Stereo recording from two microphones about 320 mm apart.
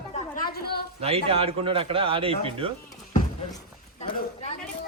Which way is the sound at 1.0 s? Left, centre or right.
Centre.